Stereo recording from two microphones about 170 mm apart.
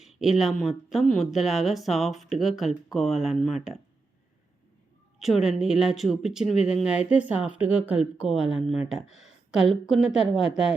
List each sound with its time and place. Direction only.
0.0 s speech: centre (ahead or behind)
5.2 s speech: centre (ahead or behind)
6.4 s speech: 40° left (ahead or behind)
6.7 s speech: 5° right (ahead or behind)